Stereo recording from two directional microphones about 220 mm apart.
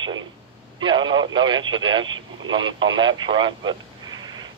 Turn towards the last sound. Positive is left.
turn(degrees=-20)  # may be behind; listen again after turning